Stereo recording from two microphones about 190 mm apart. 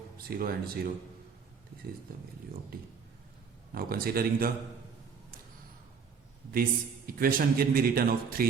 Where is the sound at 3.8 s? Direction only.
50° right (ahead or behind).